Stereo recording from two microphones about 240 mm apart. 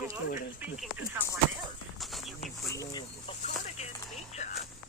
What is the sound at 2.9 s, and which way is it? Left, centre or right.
Chicken, centre.